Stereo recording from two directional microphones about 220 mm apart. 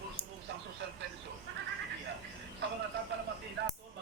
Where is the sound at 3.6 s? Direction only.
50° right (ahead or behind).